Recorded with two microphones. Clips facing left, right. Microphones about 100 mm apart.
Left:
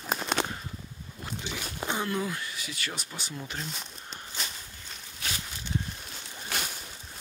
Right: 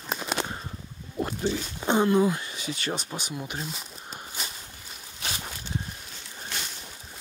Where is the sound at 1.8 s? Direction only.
25° right (ahead or behind).